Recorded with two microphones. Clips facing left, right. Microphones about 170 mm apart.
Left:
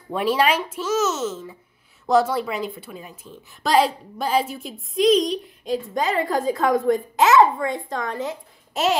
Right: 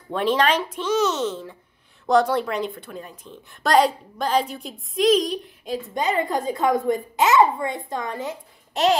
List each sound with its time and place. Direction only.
0.1 s a woman's voice: 10° left (ahead or behind)